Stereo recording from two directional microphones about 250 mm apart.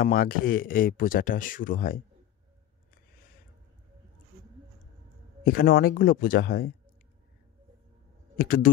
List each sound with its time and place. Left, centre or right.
0.0 s speech: left
5.4 s speech: left
8.4 s speech: left